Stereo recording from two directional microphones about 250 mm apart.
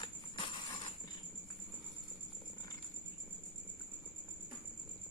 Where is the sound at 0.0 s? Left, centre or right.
Centre.